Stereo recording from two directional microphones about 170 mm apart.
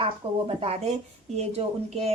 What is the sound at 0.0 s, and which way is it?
A woman's voice, 35° right (ahead or behind).